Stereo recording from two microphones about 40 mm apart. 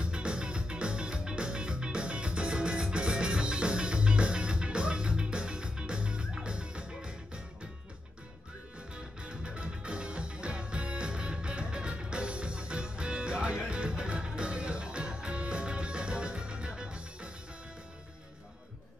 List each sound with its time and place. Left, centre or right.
0.0 s music: right
8.9 s music: right